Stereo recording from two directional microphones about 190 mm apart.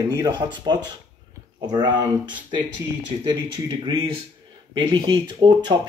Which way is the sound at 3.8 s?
25° right (ahead or behind).